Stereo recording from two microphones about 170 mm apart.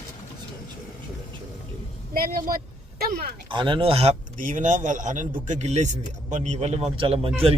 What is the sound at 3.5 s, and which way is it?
A man's voice, 30° right (ahead or behind).